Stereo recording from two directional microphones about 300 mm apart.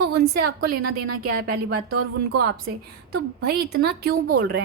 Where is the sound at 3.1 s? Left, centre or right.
Right.